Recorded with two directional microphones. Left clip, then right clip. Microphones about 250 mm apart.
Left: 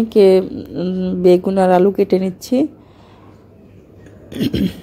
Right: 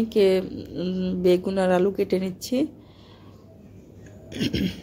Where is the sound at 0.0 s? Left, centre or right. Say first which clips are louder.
Left 9 dB; centre.